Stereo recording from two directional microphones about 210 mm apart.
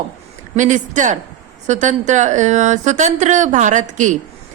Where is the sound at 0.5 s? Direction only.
35° right (ahead or behind).